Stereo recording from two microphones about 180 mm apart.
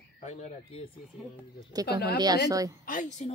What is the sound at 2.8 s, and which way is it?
Speech, 45° left (ahead or behind).